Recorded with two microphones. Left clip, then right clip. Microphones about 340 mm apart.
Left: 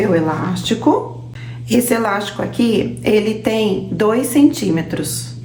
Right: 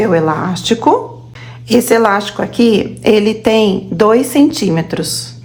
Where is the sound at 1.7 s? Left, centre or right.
Right.